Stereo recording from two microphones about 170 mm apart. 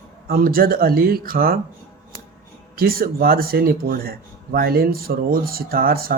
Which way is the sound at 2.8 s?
60° right (ahead or behind).